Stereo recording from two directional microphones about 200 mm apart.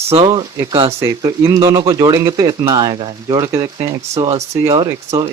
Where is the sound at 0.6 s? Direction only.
15° right (ahead or behind).